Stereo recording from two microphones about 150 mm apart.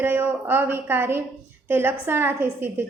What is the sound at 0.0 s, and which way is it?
A woman's voice, 10° right (ahead or behind).